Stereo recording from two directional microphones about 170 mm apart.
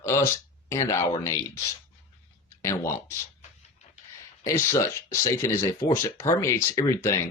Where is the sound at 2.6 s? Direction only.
15° left (ahead or behind).